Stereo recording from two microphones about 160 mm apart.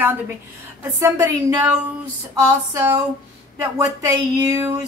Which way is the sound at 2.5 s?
20° right (ahead or behind).